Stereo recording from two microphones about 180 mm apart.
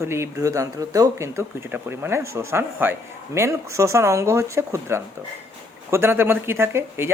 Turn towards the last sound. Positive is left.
turn(degrees=-15)  # may be behind; listen again after turning